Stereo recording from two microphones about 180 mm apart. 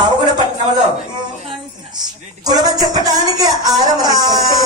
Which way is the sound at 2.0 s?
20° right (ahead or behind).